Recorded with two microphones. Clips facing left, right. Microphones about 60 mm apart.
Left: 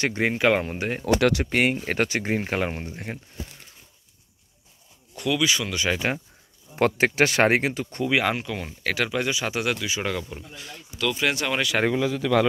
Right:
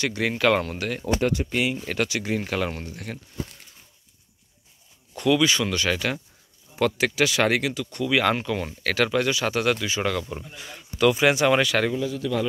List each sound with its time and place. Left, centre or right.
0.0 s speech: left
0.3 s speech: centre
1.0 s speech: left
1.8 s speech: left
5.1 s speech: centre
5.9 s speech: left
6.7 s speech: left
8.1 s speech: centre
10.3 s speech: centre